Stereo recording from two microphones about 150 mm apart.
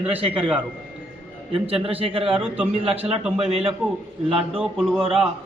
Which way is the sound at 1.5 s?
40° right (ahead or behind).